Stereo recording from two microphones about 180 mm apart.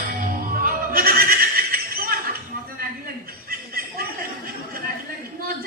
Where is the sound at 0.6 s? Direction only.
55° right (ahead or behind).